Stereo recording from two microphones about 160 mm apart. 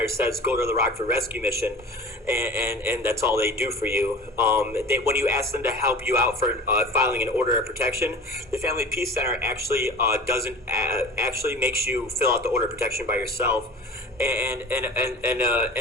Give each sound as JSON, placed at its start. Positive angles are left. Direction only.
{"t": 0.0, "sound": "speech", "side_deg": -20}